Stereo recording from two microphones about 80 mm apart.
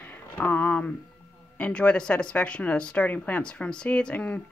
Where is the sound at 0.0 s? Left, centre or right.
Left.